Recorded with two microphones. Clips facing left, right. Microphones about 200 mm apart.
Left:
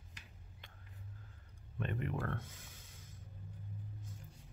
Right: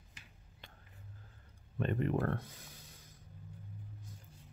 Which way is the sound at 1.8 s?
35° right (ahead or behind).